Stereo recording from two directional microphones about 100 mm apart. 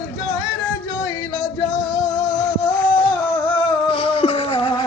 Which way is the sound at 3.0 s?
60° left (ahead or behind).